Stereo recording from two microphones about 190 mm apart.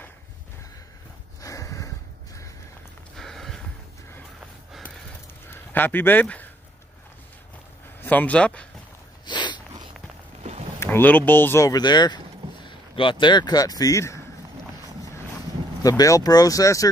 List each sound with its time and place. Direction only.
1.4 s a sound: 15° left (ahead or behind)
3.2 s a sound: centre (ahead or behind)
5.5 s speech: 10° left (ahead or behind)
8.0 s speech: 10° left (ahead or behind)
9.2 s snort: 25° left (ahead or behind)
10.8 s speech: 10° left (ahead or behind)
15.8 s speech: 20° left (ahead or behind)